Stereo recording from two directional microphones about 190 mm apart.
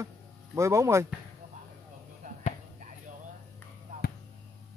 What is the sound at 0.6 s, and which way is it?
Speech, 15° right (ahead or behind).